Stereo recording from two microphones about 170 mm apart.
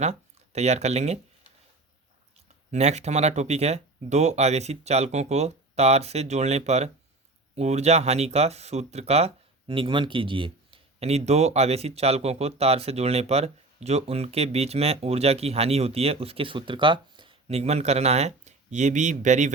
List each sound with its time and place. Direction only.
0.0 s speech: 40° right (ahead or behind)
2.7 s speech: 40° right (ahead or behind)